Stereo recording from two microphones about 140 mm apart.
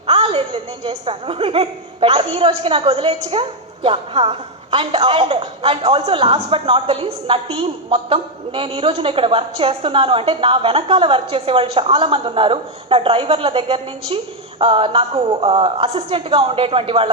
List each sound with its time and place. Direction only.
0.1 s a woman's voice: 40° right (ahead or behind)